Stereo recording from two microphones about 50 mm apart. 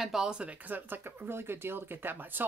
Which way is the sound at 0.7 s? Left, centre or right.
Right.